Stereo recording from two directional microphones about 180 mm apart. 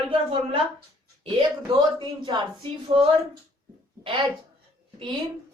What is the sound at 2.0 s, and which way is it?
A woman's voice, 25° right (ahead or behind).